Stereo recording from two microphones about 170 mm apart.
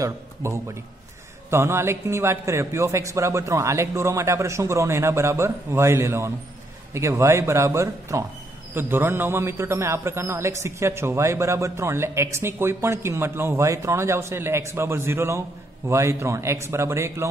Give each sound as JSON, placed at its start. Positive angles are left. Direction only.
{"t": 0.0, "sound": "a man's voice", "side_deg": -15}